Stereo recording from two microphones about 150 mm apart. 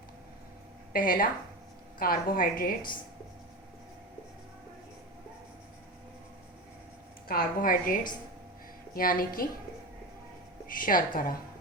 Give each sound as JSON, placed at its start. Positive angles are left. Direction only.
{"t": 0.9, "sound": "a woman's voice", "side_deg": 70}
{"t": 7.3, "sound": "a woman's voice", "side_deg": 70}
{"t": 10.7, "sound": "a woman's voice", "side_deg": 70}